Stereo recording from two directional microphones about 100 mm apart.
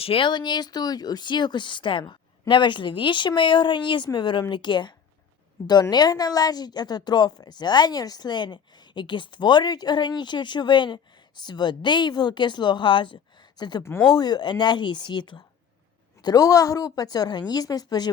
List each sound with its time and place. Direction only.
0.0 s speech: 60° left (ahead or behind)
16.2 s a woman's voice: 35° left (ahead or behind)